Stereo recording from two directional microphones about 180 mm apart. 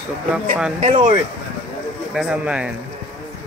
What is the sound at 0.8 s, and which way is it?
Speech, 40° right (ahead or behind).